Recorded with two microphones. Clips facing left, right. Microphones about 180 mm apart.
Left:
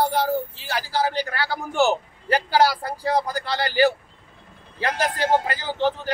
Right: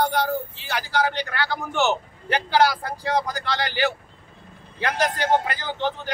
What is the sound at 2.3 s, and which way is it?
A man's voice, 5° left (ahead or behind).